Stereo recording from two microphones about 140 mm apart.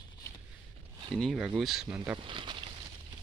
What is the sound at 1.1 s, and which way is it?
Speech, centre (ahead or behind).